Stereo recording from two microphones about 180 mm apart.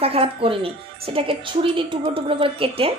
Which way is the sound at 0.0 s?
30° right (ahead or behind).